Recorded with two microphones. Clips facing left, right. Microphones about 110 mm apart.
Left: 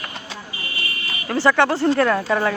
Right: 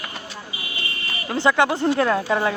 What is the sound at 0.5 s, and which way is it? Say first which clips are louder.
Vehicle: left 2 dB; 15° right (ahead or behind).